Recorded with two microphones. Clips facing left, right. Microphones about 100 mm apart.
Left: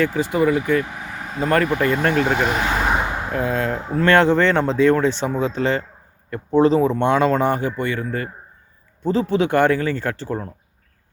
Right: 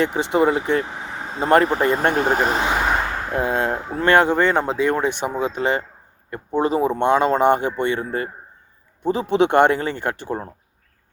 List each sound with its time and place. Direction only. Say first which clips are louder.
0.0 s speech: even; 25° right (ahead or behind)
2.8 s vehicle: even; 10° left (ahead or behind)
3.3 s speech: right 1 dB; 25° right (ahead or behind)
3.9 s speech: left 1 dB; 15° right (ahead or behind)